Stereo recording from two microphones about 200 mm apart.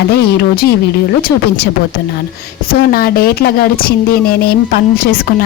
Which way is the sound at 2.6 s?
50° left (ahead or behind).